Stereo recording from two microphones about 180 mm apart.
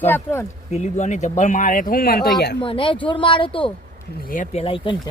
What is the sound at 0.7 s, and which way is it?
Speech, 40° left (ahead or behind).